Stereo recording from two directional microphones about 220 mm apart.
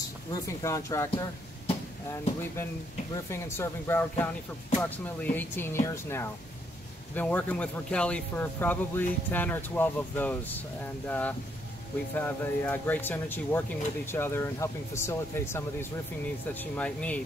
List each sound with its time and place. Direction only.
0.3 s speech: 15° left (ahead or behind)
3.3 s speech: 10° left (ahead or behind)